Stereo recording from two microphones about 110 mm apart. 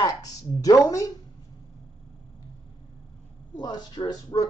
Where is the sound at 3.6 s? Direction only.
40° left (ahead or behind).